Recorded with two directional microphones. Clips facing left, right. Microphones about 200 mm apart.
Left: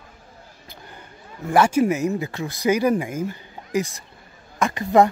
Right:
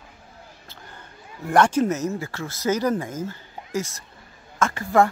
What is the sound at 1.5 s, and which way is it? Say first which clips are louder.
Speech: left 1 dB; 10° left (ahead or behind).